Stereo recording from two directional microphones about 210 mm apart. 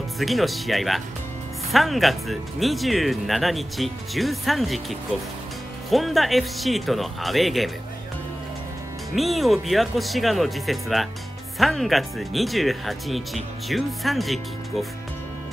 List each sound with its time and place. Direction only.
0.2 s speech: centre (ahead or behind)
9.1 s speech: centre (ahead or behind)